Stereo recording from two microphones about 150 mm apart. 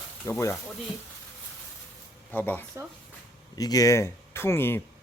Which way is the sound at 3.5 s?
25° left (ahead or behind).